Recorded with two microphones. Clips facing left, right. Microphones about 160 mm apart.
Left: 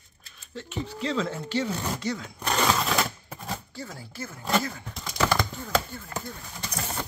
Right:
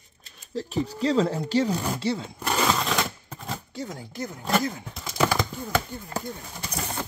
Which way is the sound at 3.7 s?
20° right (ahead or behind).